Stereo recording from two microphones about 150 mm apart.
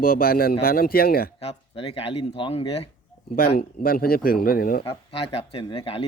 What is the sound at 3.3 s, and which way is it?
Speech, 80° left.